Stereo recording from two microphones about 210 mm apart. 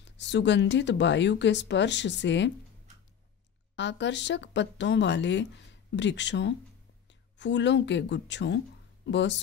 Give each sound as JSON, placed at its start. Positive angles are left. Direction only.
{"t": 0.2, "sound": "speech", "side_deg": 55}
{"t": 3.7, "sound": "speech", "side_deg": 55}